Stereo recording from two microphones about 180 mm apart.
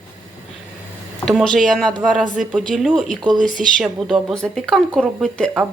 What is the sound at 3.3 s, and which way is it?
Speech, 45° right (ahead or behind).